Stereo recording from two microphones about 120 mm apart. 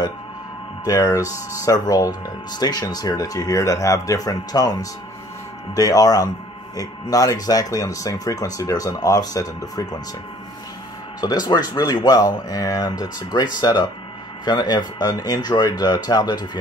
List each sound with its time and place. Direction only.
0.8 s speech: 30° left (ahead or behind)
11.1 s speech: 35° left (ahead or behind)